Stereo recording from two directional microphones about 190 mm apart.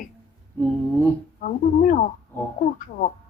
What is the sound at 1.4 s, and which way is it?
Speech, 45° left (ahead or behind).